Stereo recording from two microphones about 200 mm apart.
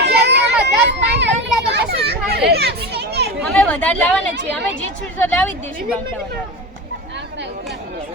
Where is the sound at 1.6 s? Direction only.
55° right (ahead or behind).